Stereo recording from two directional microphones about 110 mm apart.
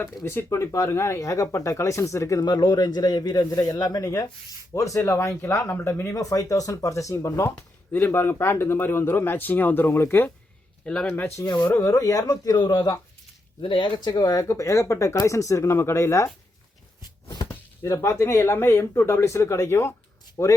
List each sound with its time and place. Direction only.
0.3 s speech: 25° left (ahead or behind)
10.8 s speech: 10° left (ahead or behind)
11.6 s speech: 20° left (ahead or behind)
17.4 s speech: 25° left (ahead or behind)